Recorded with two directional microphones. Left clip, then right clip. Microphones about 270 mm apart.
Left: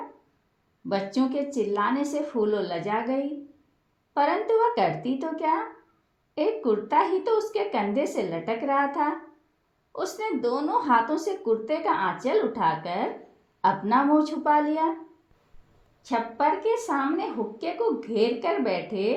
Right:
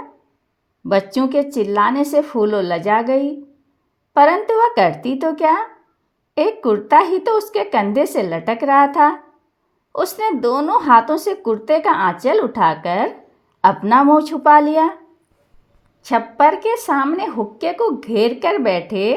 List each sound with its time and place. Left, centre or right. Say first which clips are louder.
0.9 s speech: right 10 dB; right
16.0 s speech: right 11 dB; right